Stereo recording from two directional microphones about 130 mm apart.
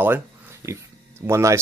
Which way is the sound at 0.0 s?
20° right (ahead or behind).